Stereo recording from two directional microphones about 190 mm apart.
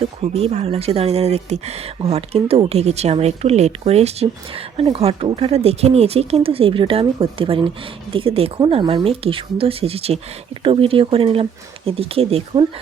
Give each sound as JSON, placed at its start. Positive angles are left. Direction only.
{"t": 0.0, "sound": "speech", "side_deg": -30}